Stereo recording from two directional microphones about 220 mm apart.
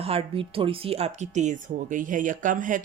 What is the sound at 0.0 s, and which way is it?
Speech, 25° right (ahead or behind).